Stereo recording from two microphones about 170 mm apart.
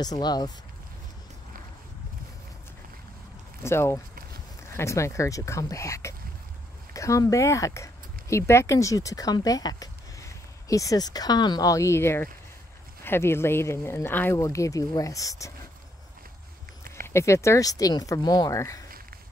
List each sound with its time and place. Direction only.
0.0 s speech: 25° left (ahead or behind)
3.6 s speech: 15° left (ahead or behind)
17.1 s speech: 15° left (ahead or behind)